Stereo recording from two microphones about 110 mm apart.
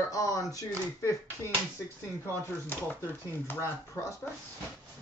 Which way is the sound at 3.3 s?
20° left (ahead or behind).